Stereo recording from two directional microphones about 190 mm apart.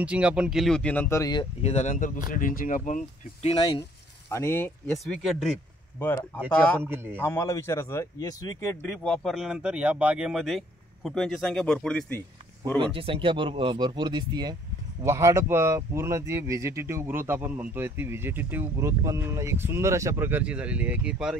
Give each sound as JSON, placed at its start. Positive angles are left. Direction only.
{"t": 0.0, "sound": "speech", "side_deg": -5}
{"t": 1.6, "sound": "speech", "side_deg": 35}
{"t": 3.4, "sound": "speech", "side_deg": 25}
{"t": 4.3, "sound": "speech", "side_deg": 15}
{"t": 5.0, "sound": "speech", "side_deg": 0}
{"t": 6.8, "sound": "speech", "side_deg": -10}
{"t": 7.2, "sound": "speech", "side_deg": 15}
{"t": 12.7, "sound": "speech", "side_deg": -25}